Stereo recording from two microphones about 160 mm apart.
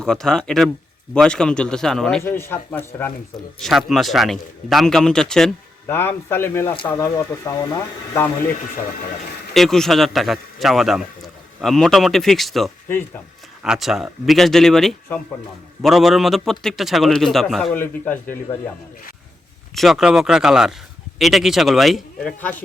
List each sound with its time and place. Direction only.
0.0 s a man's voice: 5° left (ahead or behind)
3.6 s a man's voice: centre (ahead or behind)
5.9 s speech: 15° left (ahead or behind)
6.7 s speech: 25° left (ahead or behind)
9.6 s a man's voice: centre (ahead or behind)
19.7 s a man's voice: centre (ahead or behind)